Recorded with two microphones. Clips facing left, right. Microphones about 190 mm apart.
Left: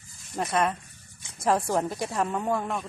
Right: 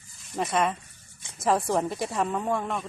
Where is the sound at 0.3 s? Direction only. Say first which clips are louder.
Even; centre (ahead or behind).